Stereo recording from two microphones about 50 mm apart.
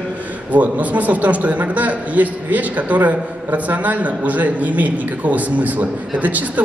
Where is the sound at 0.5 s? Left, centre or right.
Right.